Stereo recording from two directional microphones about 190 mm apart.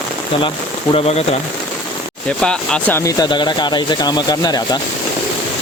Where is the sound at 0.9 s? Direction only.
35° left (ahead or behind).